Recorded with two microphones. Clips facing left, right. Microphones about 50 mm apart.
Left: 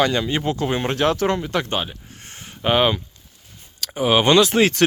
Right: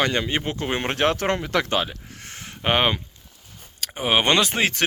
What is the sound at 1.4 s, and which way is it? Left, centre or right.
Speech, right.